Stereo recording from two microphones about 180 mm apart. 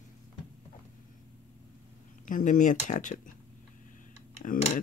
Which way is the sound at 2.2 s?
45° left (ahead or behind).